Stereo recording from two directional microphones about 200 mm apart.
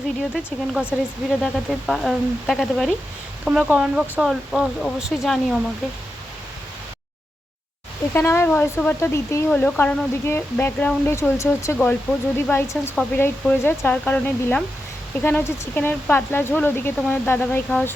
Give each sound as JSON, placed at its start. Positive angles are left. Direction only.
{"t": 0.2, "sound": "speech", "side_deg": 0}
{"t": 8.1, "sound": "speech", "side_deg": 15}